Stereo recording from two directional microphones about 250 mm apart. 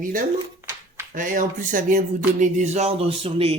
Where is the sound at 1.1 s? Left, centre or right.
Right.